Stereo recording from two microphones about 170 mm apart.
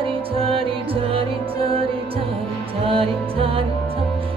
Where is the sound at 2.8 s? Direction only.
30° right (ahead or behind).